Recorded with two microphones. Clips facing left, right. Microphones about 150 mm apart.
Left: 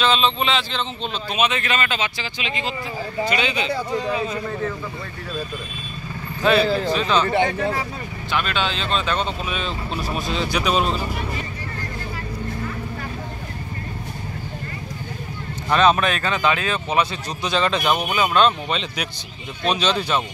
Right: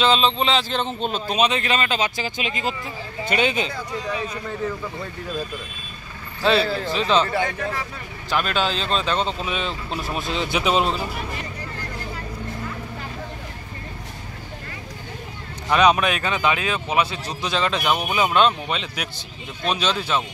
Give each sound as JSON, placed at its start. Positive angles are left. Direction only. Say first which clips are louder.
{"t": 0.0, "sound": "speech", "louder": "right 1 dB", "side_deg": -35}
{"t": 6.6, "sound": "speech", "louder": "left 4 dB", "side_deg": 20}
{"t": 6.9, "sound": "speech", "louder": "even", "side_deg": -25}
{"t": 7.2, "sound": "speech", "louder": "left 4 dB", "side_deg": 25}
{"t": 8.5, "sound": "speech", "louder": "right 1 dB", "side_deg": -40}
{"t": 15.7, "sound": "speech", "louder": "even", "side_deg": -10}
{"t": 18.1, "sound": "speech", "louder": "even", "side_deg": -20}
{"t": 18.7, "sound": "speech", "louder": "left 2 dB", "side_deg": -5}